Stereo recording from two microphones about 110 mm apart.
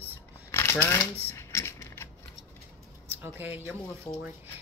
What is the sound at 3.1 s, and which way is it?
Speech, 20° right (ahead or behind).